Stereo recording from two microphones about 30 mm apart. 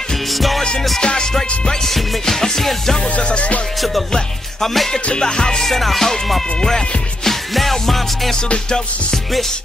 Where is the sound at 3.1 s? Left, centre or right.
Left.